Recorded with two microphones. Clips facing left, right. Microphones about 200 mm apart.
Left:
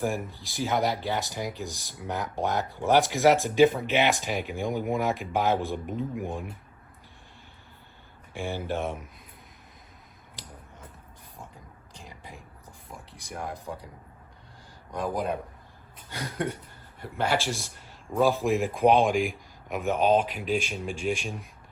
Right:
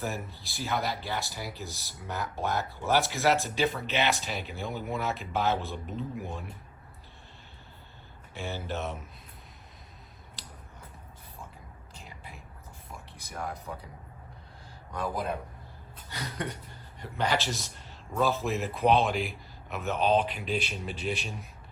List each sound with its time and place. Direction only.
0.0 s speech: 15° left (ahead or behind)
8.3 s speech: 15° left (ahead or behind)
13.7 s speech: 15° left (ahead or behind)
14.9 s speech: 15° left (ahead or behind)